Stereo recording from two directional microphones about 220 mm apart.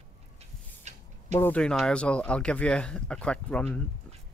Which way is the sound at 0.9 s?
30° right (ahead or behind).